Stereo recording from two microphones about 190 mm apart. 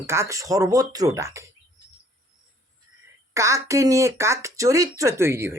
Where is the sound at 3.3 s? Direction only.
15° right (ahead or behind).